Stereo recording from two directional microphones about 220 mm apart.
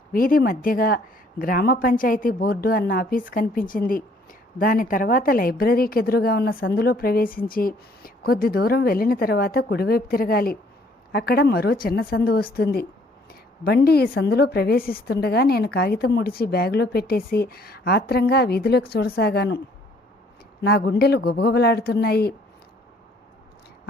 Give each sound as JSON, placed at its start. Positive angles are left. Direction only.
{"t": 0.1, "sound": "a woman's voice", "side_deg": 40}
{"t": 20.7, "sound": "a woman's voice", "side_deg": 45}